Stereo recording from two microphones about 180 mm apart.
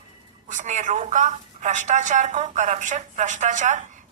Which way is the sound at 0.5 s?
40° right (ahead or behind).